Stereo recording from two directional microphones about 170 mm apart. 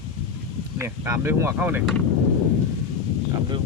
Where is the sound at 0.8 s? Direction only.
15° right (ahead or behind).